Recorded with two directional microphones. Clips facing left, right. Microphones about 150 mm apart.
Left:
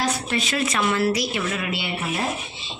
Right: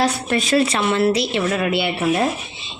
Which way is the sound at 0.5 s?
30° right (ahead or behind).